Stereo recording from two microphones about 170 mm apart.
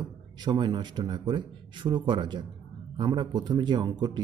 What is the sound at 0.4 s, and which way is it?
Speech, 25° right (ahead or behind).